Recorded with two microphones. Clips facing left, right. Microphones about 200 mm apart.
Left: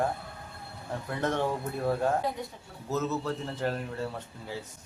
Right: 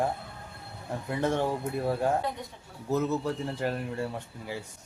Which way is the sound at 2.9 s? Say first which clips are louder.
Right 3 dB; 15° right (ahead or behind).